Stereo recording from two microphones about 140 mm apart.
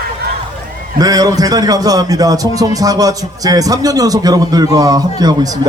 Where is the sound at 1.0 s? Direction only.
25° right (ahead or behind).